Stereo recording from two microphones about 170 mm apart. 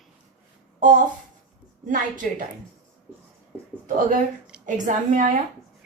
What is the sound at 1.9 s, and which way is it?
Speech, 50° right (ahead or behind).